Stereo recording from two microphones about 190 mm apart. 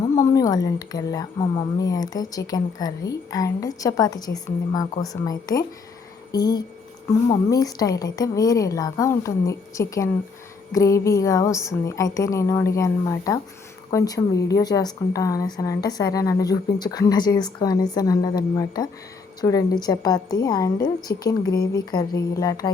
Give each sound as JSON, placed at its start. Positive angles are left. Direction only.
{"t": 0.2, "sound": "a woman's voice", "side_deg": 20}